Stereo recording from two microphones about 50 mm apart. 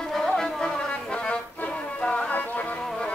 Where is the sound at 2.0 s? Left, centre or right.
Left.